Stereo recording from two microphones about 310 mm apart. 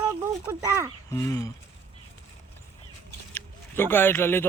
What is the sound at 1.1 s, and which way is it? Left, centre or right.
Speech, centre.